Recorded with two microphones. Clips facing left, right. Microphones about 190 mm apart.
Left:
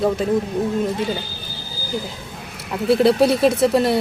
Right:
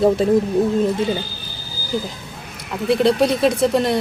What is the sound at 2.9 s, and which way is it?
Speech, 5° left (ahead or behind).